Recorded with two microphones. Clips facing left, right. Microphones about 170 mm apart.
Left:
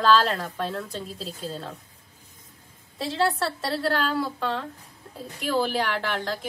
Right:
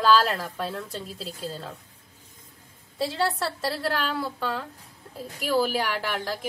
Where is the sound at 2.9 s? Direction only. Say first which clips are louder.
Left 1 dB; centre (ahead or behind).